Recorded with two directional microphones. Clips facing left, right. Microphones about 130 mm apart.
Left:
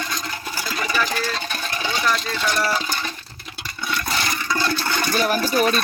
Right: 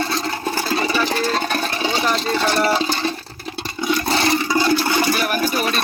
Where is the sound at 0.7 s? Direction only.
30° right (ahead or behind).